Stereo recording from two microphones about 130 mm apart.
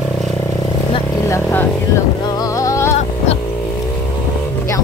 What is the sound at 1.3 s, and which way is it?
Vehicle, 20° left (ahead or behind).